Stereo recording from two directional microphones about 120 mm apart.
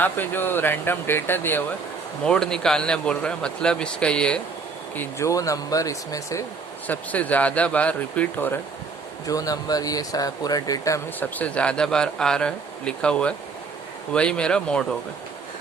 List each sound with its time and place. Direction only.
0.0 s speech: 15° left (ahead or behind)
2.2 s speech: 5° left (ahead or behind)
4.9 s speech: 25° left (ahead or behind)
6.8 s speech: 15° left (ahead or behind)
9.2 s speech: 30° left (ahead or behind)
11.2 s speech: 10° left (ahead or behind)